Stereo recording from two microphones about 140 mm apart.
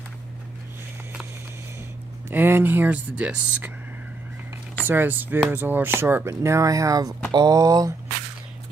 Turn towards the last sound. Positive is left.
turn(degrees=-25)  # may be behind; listen again after turning